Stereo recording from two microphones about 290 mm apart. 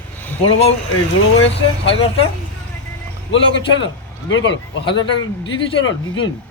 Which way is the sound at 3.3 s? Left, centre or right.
Left.